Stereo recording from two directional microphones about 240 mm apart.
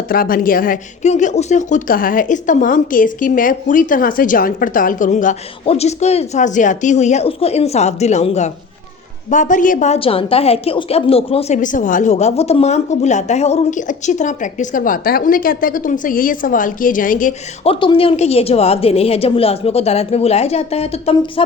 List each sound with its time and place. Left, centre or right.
0.1 s a woman's voice: left